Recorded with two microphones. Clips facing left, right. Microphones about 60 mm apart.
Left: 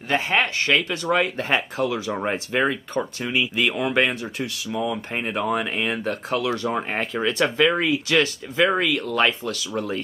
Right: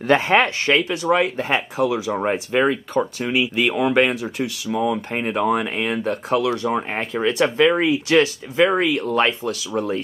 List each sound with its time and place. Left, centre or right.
0.1 s speech: right
0.7 s speech: centre
4.7 s speech: centre
5.1 s speech: centre
6.9 s speech: centre